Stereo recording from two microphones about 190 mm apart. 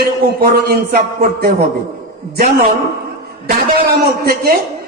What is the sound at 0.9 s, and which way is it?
Speech, 50° right (ahead or behind).